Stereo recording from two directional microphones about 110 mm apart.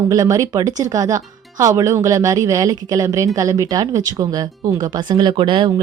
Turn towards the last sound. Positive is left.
turn(degrees=-55)  # may be behind; listen again after turning